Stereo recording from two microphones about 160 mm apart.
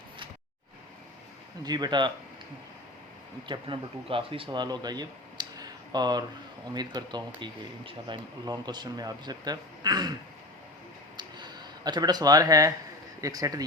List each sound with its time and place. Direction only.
1.6 s speech: 25° right (ahead or behind)
3.4 s speech: 30° right (ahead or behind)
11.2 s a sound: 25° right (ahead or behind)
13.2 s speech: 20° right (ahead or behind)